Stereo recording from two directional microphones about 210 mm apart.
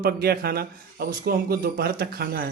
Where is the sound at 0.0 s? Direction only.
50° right (ahead or behind).